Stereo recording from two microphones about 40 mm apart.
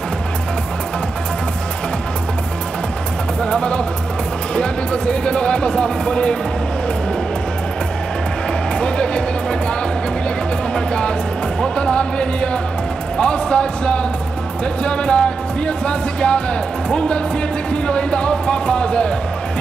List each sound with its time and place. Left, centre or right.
3.4 s music: left
8.7 s music: left
10.7 s music: left
13.2 s a sound: left
14.8 s music: left
17.8 s music: left